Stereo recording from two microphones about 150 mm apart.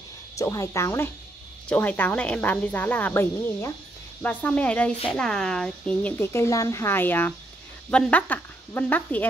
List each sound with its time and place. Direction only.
0.4 s speech: 20° left (ahead or behind)